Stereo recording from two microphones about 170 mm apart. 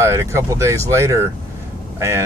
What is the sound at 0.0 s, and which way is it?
Speech, 15° right (ahead or behind).